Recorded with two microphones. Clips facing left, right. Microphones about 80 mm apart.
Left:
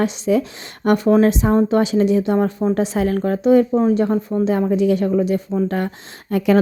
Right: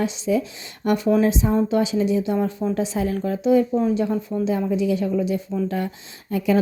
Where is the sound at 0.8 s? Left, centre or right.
Left.